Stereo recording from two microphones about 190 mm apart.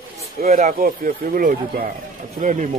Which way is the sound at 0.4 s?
40° right (ahead or behind).